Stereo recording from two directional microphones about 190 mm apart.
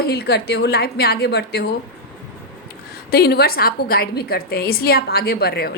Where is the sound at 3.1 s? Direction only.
55° left (ahead or behind).